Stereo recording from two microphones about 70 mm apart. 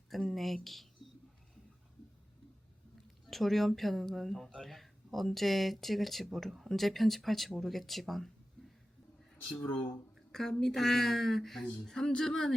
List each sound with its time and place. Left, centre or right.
0.1 s speech: centre
3.2 s speech: centre
8.6 s a sound: centre
9.6 s speech: left
10.6 s speech: centre